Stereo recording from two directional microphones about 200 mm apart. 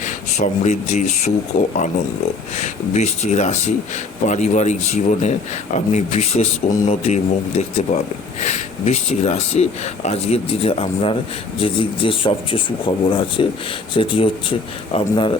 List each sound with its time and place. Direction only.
0.0 s speech: 35° left (ahead or behind)
2.6 s speech: 35° left (ahead or behind)